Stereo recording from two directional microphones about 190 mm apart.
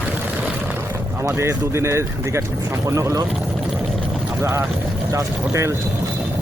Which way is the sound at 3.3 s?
Centre (ahead or behind).